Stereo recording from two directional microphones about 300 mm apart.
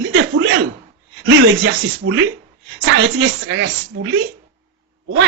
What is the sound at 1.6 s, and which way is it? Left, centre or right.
Speech, right.